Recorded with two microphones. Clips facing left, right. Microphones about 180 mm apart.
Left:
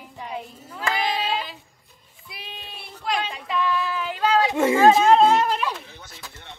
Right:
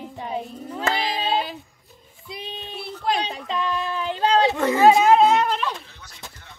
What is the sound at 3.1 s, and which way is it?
Children playing, 25° right (ahead or behind).